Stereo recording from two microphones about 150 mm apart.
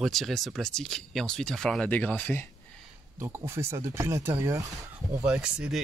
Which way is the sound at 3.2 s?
15° right (ahead or behind).